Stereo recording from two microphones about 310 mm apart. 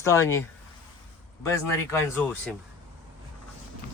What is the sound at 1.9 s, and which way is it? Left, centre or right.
Speech, centre.